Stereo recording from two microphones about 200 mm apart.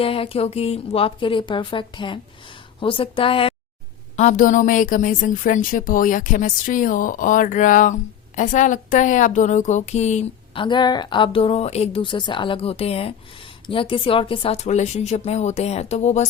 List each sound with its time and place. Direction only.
0.0 s a woman's voice: 30° left (ahead or behind)
4.2 s a woman's voice: 40° left (ahead or behind)